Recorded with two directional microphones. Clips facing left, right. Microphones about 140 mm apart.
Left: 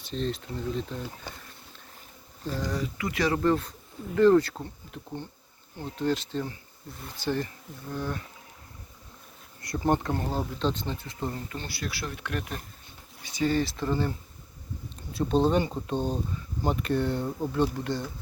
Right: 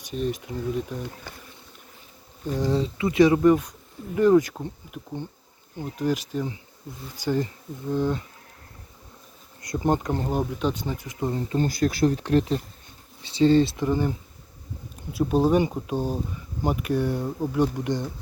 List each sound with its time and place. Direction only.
0.0 s speech: 10° right (ahead or behind)
2.5 s speech: 25° right (ahead or behind)
9.6 s speech: 20° right (ahead or behind)
11.3 s speech: 30° right (ahead or behind)
11.6 s speech: 45° right (ahead or behind); by 14.1 s 15° right (ahead or behind)
15.1 s speech: 10° right (ahead or behind)